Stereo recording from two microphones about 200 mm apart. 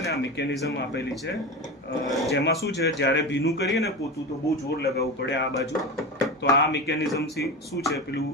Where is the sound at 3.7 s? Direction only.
15° left (ahead or behind).